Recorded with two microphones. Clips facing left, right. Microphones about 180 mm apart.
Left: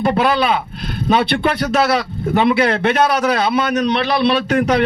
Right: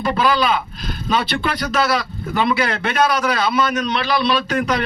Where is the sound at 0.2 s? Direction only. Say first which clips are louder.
Left 2 dB; 60° left (ahead or behind).